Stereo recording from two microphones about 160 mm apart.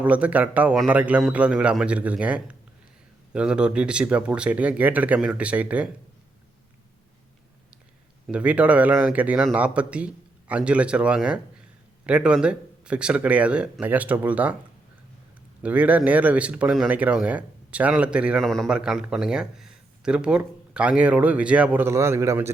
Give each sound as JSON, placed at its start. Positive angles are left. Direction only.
{"t": 0.0, "sound": "speech", "side_deg": -10}
{"t": 8.3, "sound": "speech", "side_deg": -10}
{"t": 15.6, "sound": "speech", "side_deg": -10}